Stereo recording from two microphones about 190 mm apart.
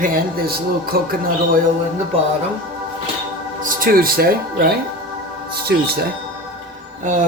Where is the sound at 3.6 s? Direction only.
50° right (ahead or behind).